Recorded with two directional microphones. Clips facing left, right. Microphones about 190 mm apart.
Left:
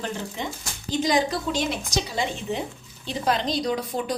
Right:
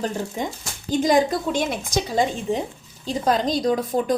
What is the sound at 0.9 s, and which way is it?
Speech, 50° right (ahead or behind).